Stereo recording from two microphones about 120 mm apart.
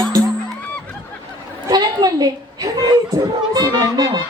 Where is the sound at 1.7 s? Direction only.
35° right (ahead or behind).